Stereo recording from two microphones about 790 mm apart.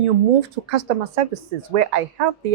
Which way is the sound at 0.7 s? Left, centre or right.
Right.